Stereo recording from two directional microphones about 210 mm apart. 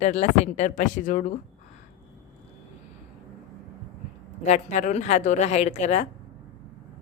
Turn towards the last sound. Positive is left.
turn(degrees=35)  # may be behind; listen again after turning